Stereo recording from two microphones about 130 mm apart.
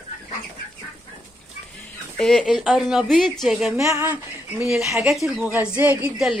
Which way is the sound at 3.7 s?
25° right (ahead or behind).